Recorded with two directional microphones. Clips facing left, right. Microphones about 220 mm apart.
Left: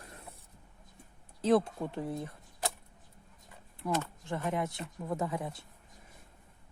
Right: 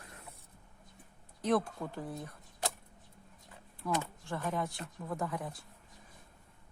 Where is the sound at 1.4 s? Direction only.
25° left (ahead or behind).